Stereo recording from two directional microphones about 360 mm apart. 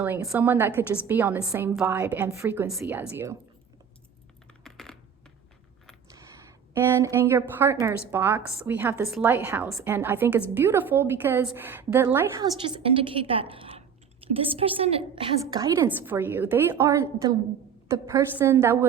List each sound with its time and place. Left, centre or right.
0.0 s a woman's voice: centre
4.6 s computer keyboard: centre
6.1 s a woman's voice: centre